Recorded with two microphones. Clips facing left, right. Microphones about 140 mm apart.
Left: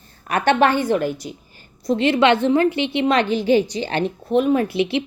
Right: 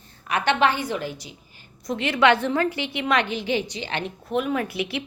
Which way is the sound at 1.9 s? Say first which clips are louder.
Left 4 dB; 30° left (ahead or behind).